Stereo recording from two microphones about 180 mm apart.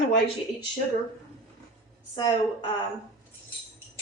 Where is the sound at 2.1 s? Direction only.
25° left (ahead or behind).